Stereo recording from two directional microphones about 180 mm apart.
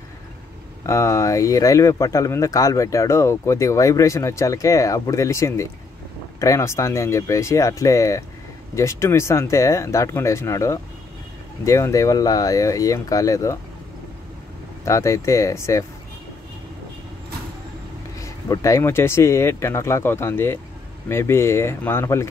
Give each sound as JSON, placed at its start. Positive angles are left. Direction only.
{"t": 0.8, "sound": "speech", "side_deg": 15}
{"t": 14.9, "sound": "speech", "side_deg": 15}
{"t": 18.2, "sound": "speech", "side_deg": 15}